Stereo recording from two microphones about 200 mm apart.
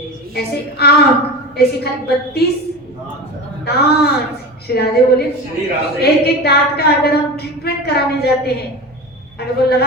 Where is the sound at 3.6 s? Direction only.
55° left (ahead or behind).